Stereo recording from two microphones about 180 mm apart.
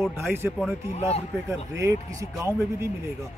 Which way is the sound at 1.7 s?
15° right (ahead or behind).